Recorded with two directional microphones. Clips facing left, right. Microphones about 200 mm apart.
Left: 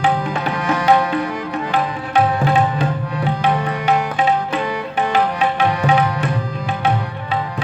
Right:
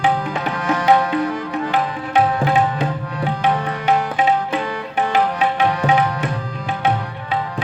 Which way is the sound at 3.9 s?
20° right (ahead or behind).